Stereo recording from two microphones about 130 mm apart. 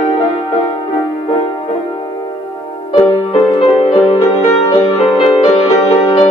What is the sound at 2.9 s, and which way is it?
Music, 35° left (ahead or behind).